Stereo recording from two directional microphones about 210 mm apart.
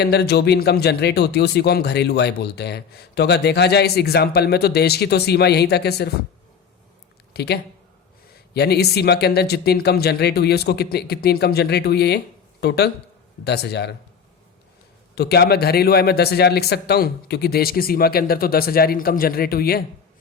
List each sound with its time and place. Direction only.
0.0 s speech: 50° left (ahead or behind)
7.3 s speech: 50° left (ahead or behind)
15.1 s speech: 50° left (ahead or behind)